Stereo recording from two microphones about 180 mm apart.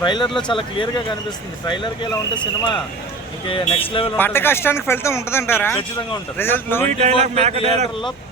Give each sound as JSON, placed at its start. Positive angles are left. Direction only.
{"t": 0.0, "sound": "speech", "side_deg": 25}
{"t": 4.2, "sound": "a man's voice", "side_deg": 10}
{"t": 7.0, "sound": "a man's voice", "side_deg": -35}